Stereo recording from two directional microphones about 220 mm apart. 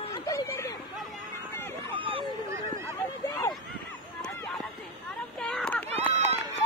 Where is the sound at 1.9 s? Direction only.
25° right (ahead or behind).